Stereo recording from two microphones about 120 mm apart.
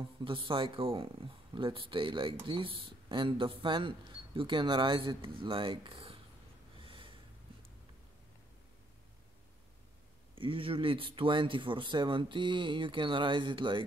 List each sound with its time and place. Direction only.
0.2 s speech: 45° right (ahead or behind)
6.8 s snort: 45° right (ahead or behind)
10.3 s speech: 45° right (ahead or behind)